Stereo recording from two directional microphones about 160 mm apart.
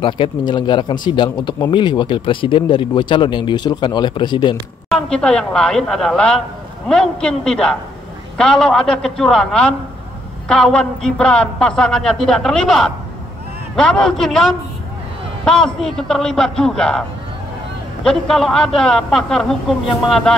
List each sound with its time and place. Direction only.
0.0 s speech: 30° left (ahead or behind)
4.8 s a man's voice: 5° left (ahead or behind)
18.0 s a man's voice: centre (ahead or behind)